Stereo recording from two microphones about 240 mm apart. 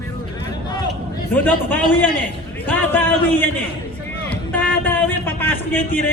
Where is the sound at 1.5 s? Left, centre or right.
Centre.